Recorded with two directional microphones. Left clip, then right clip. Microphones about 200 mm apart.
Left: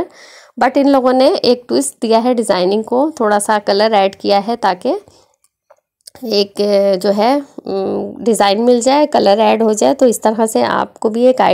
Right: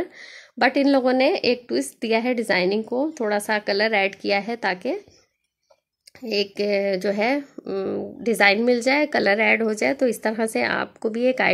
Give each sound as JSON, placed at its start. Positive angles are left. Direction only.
{"t": 0.7, "sound": "a woman's voice", "side_deg": 0}
{"t": 2.8, "sound": "speech", "side_deg": 20}
{"t": 3.2, "sound": "a woman's voice", "side_deg": 0}
{"t": 6.2, "sound": "a woman's voice", "side_deg": 5}
{"t": 7.8, "sound": "a woman's voice", "side_deg": 15}
{"t": 8.3, "sound": "a woman's voice", "side_deg": 0}
{"t": 9.9, "sound": "speech", "side_deg": 25}
{"t": 10.2, "sound": "a woman's voice", "side_deg": 0}